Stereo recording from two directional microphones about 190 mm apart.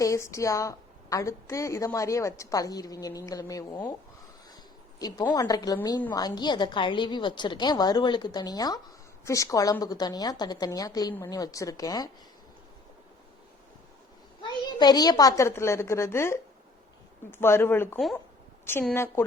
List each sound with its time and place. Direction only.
0.0 s a woman's voice: 15° left (ahead or behind)
4.9 s a woman's voice: 20° left (ahead or behind)
14.4 s a child's voice: 25° left (ahead or behind)